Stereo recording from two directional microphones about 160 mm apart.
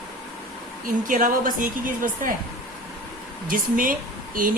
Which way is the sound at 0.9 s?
55° right (ahead or behind).